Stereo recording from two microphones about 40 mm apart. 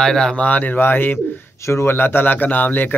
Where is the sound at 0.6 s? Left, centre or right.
Left.